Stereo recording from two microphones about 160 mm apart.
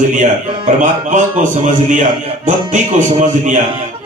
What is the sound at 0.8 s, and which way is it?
A man's voice, 50° right (ahead or behind).